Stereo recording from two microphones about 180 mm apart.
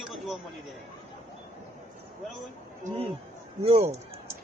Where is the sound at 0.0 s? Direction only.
Centre (ahead or behind).